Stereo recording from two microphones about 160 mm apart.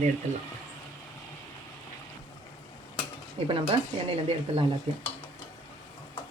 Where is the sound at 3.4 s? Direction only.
35° right (ahead or behind).